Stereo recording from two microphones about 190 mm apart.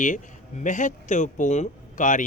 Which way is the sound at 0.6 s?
40° left (ahead or behind).